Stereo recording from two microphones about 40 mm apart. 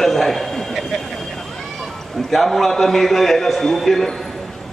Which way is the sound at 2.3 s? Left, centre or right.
Centre.